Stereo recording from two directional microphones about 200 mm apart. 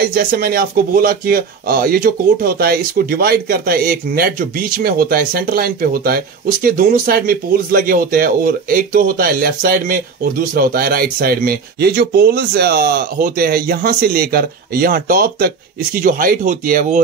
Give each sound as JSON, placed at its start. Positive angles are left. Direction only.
{"t": 0.1, "sound": "speech", "side_deg": -45}